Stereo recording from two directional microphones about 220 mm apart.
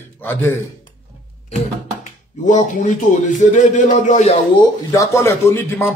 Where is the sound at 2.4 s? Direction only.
35° left (ahead or behind).